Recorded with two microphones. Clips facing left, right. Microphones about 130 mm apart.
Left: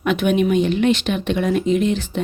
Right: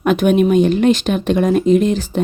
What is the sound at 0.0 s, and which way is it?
Speech, 40° right (ahead or behind).